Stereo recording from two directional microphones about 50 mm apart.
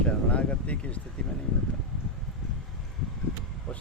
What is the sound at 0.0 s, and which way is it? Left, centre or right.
Speech, left.